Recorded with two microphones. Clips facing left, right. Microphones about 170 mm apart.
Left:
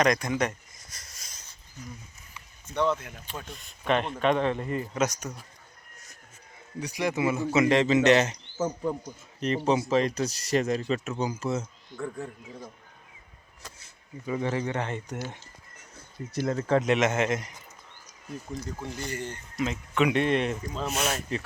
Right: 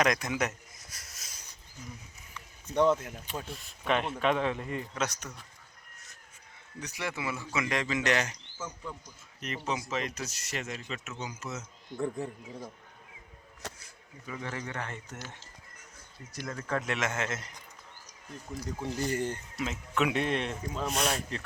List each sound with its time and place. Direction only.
0.0 s a sound: 5° right (ahead or behind)
2.6 s speech: 40° right (ahead or behind)
3.2 s speech: 5° right (ahead or behind); by 5.3 s 10° left (ahead or behind)
6.7 s speech: 15° left (ahead or behind)
8.5 s speech: 45° left (ahead or behind)
9.4 s speech: 30° left (ahead or behind)
11.9 s a man's voice: 20° right (ahead or behind)
13.7 s speech: 25° left (ahead or behind)
16.3 s speech: 30° left (ahead or behind)
18.5 s speech: 5° right (ahead or behind)
18.9 s speech: 45° right (ahead or behind)
19.5 s speech: centre (ahead or behind)